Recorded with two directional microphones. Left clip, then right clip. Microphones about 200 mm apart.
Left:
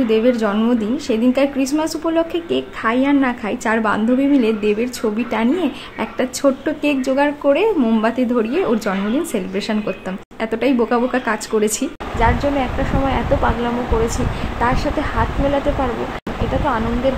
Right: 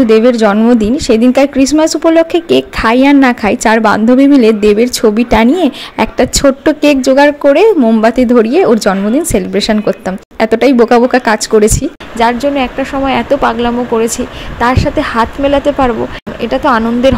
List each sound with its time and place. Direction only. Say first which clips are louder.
0.1 s speech: right 8 dB; 35° right (ahead or behind)
14.6 s a woman's voice: right 8 dB; 25° right (ahead or behind)